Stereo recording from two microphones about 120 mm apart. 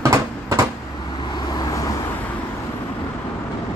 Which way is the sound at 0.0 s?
25° right (ahead or behind).